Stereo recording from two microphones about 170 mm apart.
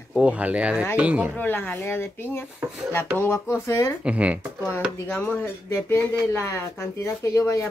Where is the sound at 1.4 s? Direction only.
10° left (ahead or behind).